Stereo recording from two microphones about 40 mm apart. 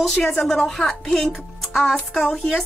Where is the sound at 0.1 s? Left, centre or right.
Centre.